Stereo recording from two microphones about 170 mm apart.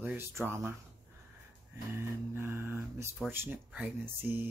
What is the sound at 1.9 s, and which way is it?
Speech, 15° right (ahead or behind).